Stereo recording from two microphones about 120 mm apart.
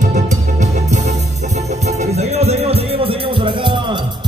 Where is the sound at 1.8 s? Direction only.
65° right (ahead or behind).